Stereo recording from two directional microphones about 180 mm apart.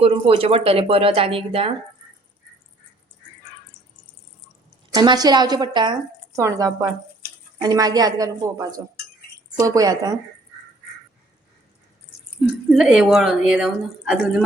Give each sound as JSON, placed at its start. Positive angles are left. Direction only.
{"t": 0.0, "sound": "speech", "side_deg": -30}
{"t": 4.9, "sound": "a woman's voice", "side_deg": -20}
{"t": 12.4, "sound": "speech", "side_deg": 0}